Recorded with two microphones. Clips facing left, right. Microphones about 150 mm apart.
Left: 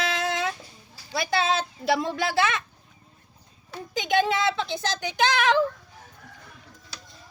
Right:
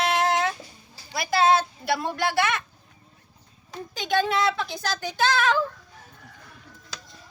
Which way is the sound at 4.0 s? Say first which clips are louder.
Even; 20° left (ahead or behind).